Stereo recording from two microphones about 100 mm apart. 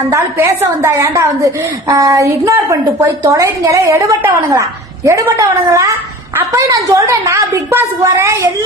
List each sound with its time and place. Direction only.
0.1 s a woman's voice: 30° right (ahead or behind)